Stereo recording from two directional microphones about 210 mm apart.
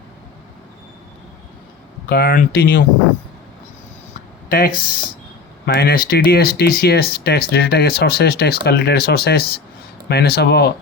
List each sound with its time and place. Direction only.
2.0 s speech: 45° left (ahead or behind)
4.4 s speech: 45° left (ahead or behind)